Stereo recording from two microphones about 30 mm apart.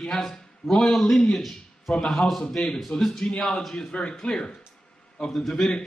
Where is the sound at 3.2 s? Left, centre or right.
Left.